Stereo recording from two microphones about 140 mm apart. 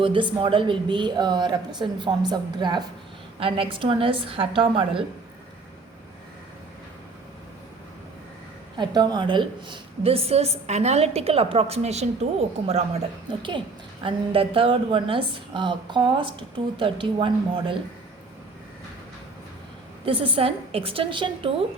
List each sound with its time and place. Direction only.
0.0 s a woman's voice: 35° right (ahead or behind)
8.8 s a woman's voice: 30° right (ahead or behind); by 13.0 s 45° right (ahead or behind)
13.3 s a woman's voice: 35° right (ahead or behind)
20.1 s a woman's voice: 40° right (ahead or behind)